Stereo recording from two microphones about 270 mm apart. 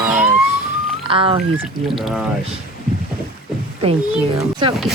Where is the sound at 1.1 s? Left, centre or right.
Centre.